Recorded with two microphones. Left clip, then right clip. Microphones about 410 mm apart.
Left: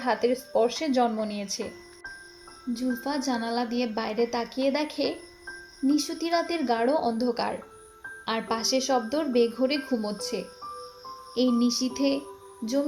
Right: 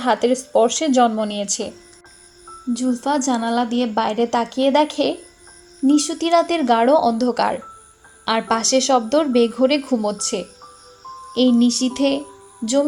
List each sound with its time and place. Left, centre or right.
0.0 s a woman's voice: left
0.7 s speech: left
1.0 s a woman's voice: left
2.7 s a woman's voice: left